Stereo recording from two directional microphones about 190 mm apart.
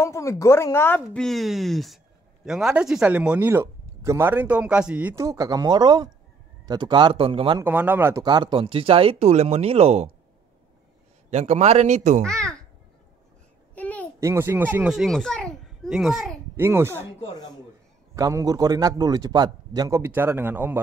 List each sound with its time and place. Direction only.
0.0 s speech: 15° left (ahead or behind); by 7.6 s 25° right (ahead or behind)
7.6 s speech: 10° right (ahead or behind); by 10.1 s 35° right (ahead or behind)
11.2 s a man's voice: 35° right (ahead or behind)
12.3 s babbling: 5° left (ahead or behind)
13.7 s a sound: 10° left (ahead or behind)
14.2 s a child's voice: 15° right (ahead or behind)
16.5 s speech: 15° right (ahead or behind)
18.1 s speech: 20° right (ahead or behind)